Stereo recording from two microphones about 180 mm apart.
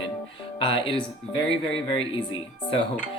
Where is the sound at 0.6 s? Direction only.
30° left (ahead or behind).